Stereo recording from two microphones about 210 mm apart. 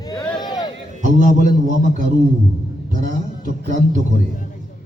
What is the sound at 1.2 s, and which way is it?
A man's voice, 40° right (ahead or behind).